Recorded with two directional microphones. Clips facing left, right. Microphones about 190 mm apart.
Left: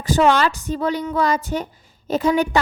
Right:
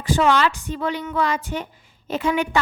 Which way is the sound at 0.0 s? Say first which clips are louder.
Left 2 dB; 40° left (ahead or behind).